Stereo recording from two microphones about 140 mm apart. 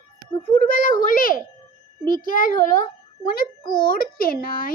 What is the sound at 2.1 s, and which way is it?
A child's voice, 85° left.